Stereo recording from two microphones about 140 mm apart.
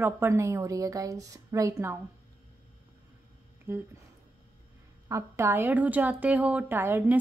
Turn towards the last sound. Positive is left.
turn(degrees=-15)  # may be behind; listen again after turning